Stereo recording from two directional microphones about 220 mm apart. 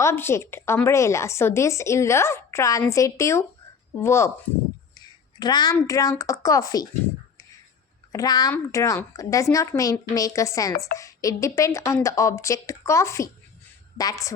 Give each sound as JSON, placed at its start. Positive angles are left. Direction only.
{"t": 0.0, "sound": "a woman's voice", "side_deg": 10}
{"t": 5.4, "sound": "a woman's voice", "side_deg": 20}
{"t": 8.1, "sound": "a woman's voice", "side_deg": 15}